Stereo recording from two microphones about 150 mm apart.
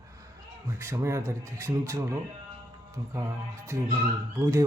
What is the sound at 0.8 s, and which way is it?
A man's voice, 20° right (ahead or behind).